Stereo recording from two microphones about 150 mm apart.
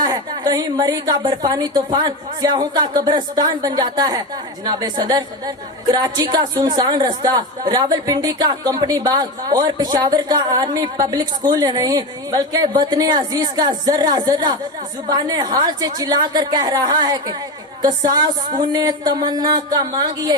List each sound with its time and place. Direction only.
0.0 s a woman's voice: 25° right (ahead or behind)